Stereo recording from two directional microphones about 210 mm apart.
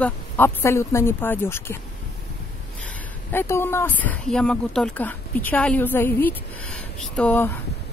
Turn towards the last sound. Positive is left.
turn(degrees=10)  # may be behind; listen again after turning